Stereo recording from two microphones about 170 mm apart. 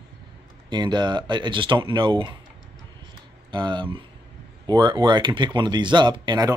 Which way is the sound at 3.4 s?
25° right (ahead or behind).